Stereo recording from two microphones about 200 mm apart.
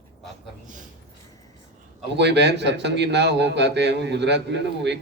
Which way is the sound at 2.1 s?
60° right (ahead or behind).